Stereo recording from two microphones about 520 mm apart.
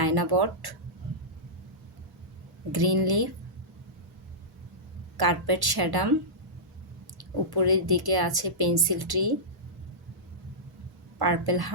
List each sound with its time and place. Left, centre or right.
0.0 s speech: right
2.7 s a woman's voice: right
5.1 s a woman's voice: right
7.2 s a woman's voice: right
11.2 s a woman's voice: right